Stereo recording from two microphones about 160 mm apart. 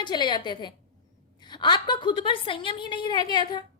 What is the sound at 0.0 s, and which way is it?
A woman's voice, 25° left (ahead or behind).